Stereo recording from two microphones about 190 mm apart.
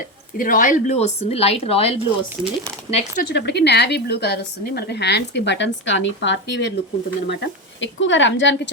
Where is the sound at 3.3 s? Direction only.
60° left (ahead or behind).